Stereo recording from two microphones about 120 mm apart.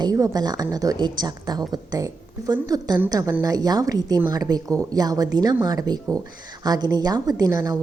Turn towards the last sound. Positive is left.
turn(degrees=-25)  # may be behind; listen again after turning